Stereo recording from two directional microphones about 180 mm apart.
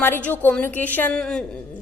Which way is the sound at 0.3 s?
10° left (ahead or behind).